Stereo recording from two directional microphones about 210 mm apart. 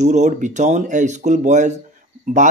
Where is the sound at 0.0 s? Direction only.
35° right (ahead or behind).